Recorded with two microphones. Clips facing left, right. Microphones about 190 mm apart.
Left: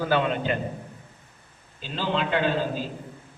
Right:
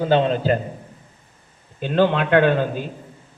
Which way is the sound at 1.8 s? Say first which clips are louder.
Right 9 dB; 60° right (ahead or behind).